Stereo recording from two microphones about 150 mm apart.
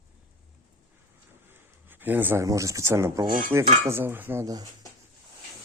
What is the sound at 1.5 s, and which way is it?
Speech, 15° right (ahead or behind).